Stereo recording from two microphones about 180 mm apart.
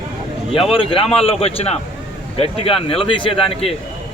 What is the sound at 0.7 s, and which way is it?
A man's voice, 30° left (ahead or behind).